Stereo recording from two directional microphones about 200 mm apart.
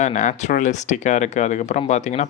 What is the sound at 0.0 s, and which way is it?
Speech, 35° left (ahead or behind).